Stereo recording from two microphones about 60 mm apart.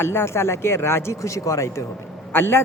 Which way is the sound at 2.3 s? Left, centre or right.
Left.